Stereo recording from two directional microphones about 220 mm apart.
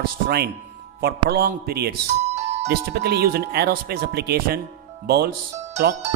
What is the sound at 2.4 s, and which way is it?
Music, 30° right (ahead or behind).